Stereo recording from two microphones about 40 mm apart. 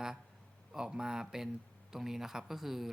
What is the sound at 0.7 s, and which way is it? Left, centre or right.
Speech, centre.